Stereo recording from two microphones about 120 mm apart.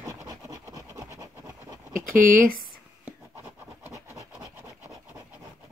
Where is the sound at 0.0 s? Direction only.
25° right (ahead or behind).